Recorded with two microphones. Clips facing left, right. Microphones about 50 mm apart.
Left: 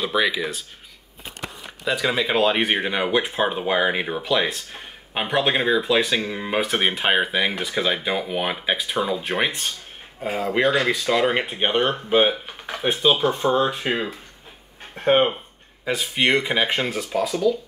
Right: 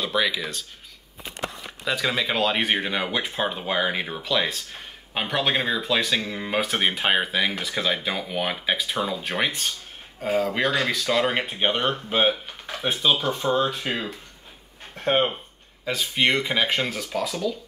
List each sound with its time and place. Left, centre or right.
0.0 s speech: centre
1.9 s speech: centre